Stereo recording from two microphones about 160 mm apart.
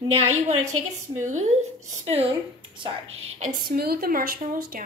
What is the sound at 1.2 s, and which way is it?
Speech, 45° right (ahead or behind).